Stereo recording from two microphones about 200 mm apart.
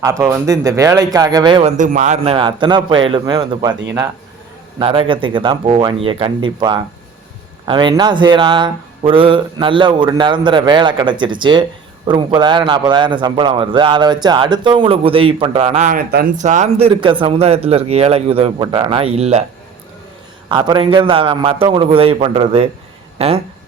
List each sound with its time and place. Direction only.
0.0 s speech: 15° right (ahead or behind)
1.7 s a man's voice: 40° right (ahead or behind)
4.8 s a man's voice: 25° right (ahead or behind)
20.5 s a man's voice: 20° right (ahead or behind)